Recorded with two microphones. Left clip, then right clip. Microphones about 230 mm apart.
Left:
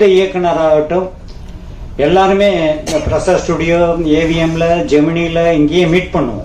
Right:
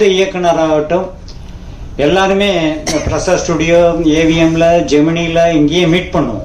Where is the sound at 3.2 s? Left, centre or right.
Right.